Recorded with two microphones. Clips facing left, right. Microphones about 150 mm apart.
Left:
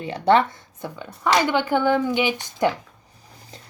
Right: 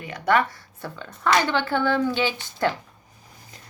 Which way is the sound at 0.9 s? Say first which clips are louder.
Left 1 dB; 15° left (ahead or behind).